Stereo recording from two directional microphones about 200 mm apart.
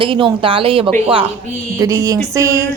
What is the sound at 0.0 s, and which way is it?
Speech, 25° right (ahead or behind).